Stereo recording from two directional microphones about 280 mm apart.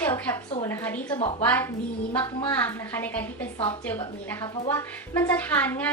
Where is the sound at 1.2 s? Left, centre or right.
Left.